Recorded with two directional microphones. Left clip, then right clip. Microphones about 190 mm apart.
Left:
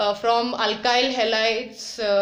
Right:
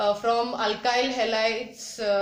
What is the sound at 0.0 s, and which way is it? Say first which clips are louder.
Speech: left 3 dB; 30° left (ahead or behind).